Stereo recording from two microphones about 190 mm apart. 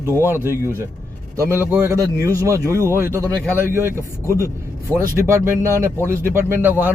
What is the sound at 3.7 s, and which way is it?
Speech, 15° right (ahead or behind).